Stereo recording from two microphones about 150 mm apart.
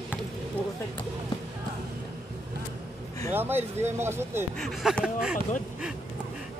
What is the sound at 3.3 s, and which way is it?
Speech, 15° right (ahead or behind).